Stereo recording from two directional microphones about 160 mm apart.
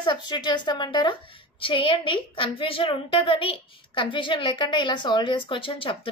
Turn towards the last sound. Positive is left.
turn(degrees=35)  # may be behind; listen again after turning